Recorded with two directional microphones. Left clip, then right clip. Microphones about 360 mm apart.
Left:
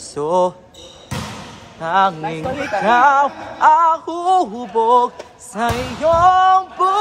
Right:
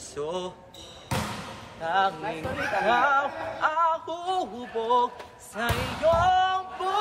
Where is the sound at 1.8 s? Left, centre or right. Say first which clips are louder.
Left 9 dB; centre.